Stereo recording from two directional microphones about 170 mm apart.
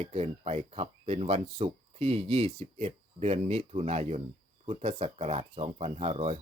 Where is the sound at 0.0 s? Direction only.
40° right (ahead or behind).